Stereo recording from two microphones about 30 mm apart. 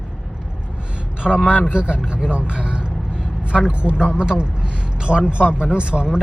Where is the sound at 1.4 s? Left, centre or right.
Right.